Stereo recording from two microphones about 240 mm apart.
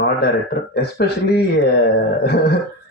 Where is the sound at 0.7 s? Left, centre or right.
Left.